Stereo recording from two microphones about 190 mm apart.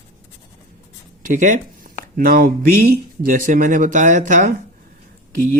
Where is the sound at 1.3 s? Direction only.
40° right (ahead or behind).